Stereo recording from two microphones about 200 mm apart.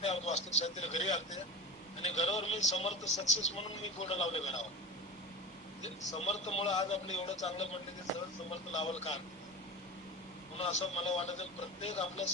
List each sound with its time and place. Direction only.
0.0 s a man's voice: 35° left (ahead or behind)
5.8 s a man's voice: 35° left (ahead or behind)
10.6 s a man's voice: 30° left (ahead or behind)